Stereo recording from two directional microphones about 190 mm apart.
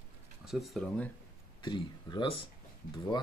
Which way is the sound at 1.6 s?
25° left (ahead or behind).